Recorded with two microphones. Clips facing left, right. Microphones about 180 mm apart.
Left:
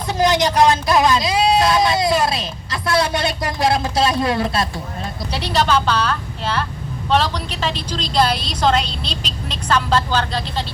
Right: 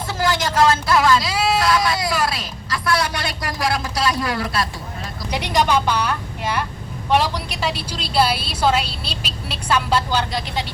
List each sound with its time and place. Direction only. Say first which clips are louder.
0.1 s speech: left 5 dB; 20° left (ahead or behind)
5.3 s a woman's voice: even; 15° right (ahead or behind)